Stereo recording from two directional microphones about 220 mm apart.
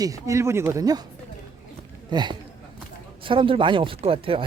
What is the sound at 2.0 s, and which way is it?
Speech, 20° right (ahead or behind).